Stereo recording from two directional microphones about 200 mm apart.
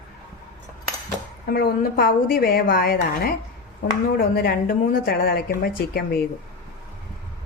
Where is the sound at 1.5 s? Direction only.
50° left (ahead or behind).